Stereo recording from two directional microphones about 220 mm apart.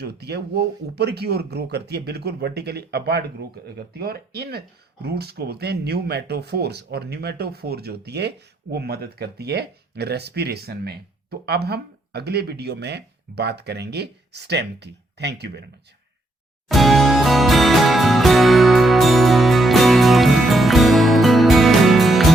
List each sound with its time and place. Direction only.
0.0 s speech: 50° right (ahead or behind)
16.6 s music: centre (ahead or behind)